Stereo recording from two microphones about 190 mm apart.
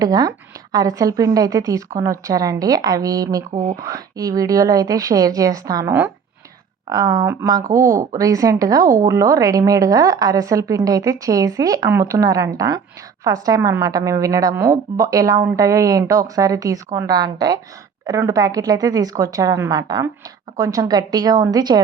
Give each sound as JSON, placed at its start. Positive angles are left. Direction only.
{"t": 0.0, "sound": "a woman's voice", "side_deg": -20}
{"t": 3.5, "sound": "speech", "side_deg": -40}
{"t": 3.8, "sound": "a woman's voice", "side_deg": -20}